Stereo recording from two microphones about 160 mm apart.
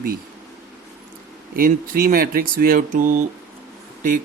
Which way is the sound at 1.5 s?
65° right (ahead or behind).